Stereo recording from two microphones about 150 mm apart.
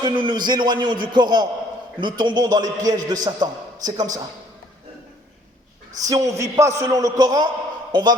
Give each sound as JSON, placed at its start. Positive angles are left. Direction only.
{"t": 0.0, "sound": "a man's voice", "side_deg": -30}
{"t": 6.0, "sound": "a man's voice", "side_deg": -25}